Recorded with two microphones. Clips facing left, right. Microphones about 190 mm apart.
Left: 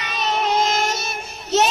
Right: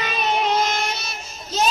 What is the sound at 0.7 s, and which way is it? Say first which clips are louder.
Child singing: left 4 dB; 45° left (ahead or behind).